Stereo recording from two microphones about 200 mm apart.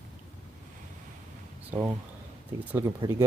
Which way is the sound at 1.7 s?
5° right (ahead or behind).